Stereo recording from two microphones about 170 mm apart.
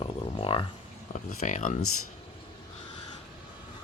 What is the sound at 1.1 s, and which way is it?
Speech, 45° left (ahead or behind).